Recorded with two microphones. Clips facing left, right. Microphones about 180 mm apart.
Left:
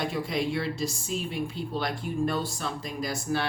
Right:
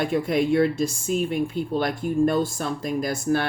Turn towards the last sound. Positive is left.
turn(degrees=-50)  # may be behind; listen again after turning